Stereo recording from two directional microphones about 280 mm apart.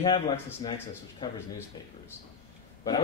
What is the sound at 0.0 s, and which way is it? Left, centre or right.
Speech, centre.